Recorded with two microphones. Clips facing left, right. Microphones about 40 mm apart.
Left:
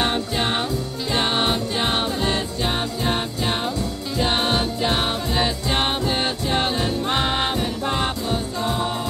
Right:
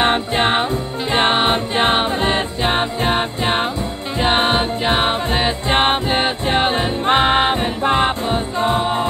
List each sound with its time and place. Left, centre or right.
0.0 s music: right